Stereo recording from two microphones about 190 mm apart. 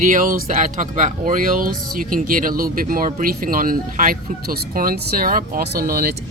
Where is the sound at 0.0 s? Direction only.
45° right (ahead or behind).